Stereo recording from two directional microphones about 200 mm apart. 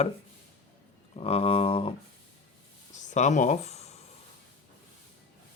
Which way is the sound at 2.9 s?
35° left (ahead or behind).